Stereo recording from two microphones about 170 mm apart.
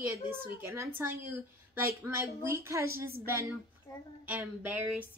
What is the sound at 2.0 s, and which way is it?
Speech, 15° right (ahead or behind).